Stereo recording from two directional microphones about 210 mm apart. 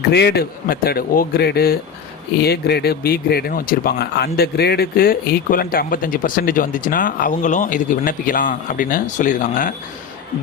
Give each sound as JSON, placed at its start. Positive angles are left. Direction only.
{"t": 0.1, "sound": "speech", "side_deg": 55}